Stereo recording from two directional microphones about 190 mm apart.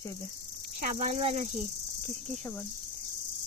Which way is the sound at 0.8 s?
40° right (ahead or behind).